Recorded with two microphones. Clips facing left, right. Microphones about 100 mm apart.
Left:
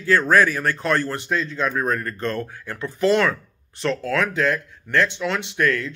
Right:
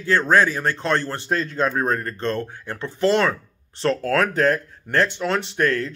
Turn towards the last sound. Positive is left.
turn(degrees=-35)  # may be behind; listen again after turning